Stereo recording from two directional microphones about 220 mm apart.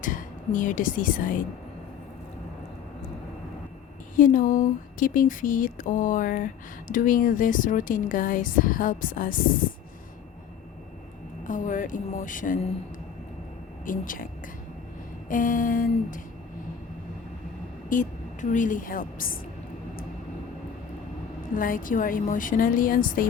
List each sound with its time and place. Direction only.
0.0 s speech: 35° left (ahead or behind)
4.1 s speech: 40° left (ahead or behind)
11.4 s speech: 35° left (ahead or behind)
13.8 s speech: 40° left (ahead or behind)
15.3 s speech: 40° left (ahead or behind)
17.8 s speech: 35° left (ahead or behind)
21.5 s speech: 40° left (ahead or behind)